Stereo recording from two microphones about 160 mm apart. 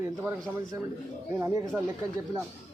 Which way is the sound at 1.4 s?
20° right (ahead or behind).